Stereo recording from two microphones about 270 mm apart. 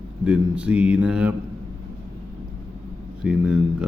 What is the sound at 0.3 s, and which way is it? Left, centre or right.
Speech, centre.